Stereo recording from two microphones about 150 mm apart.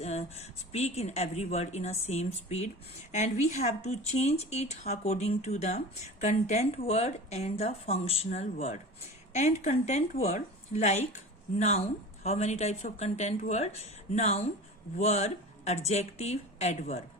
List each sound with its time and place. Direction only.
0.0 s a woman's voice: 45° left (ahead or behind)